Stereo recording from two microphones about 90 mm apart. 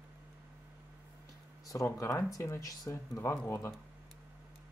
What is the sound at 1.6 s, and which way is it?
Speech, 40° left (ahead or behind).